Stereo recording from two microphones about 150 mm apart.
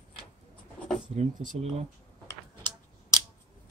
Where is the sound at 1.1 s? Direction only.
50° right (ahead or behind).